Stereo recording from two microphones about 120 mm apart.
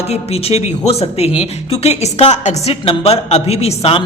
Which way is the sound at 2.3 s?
70° left (ahead or behind).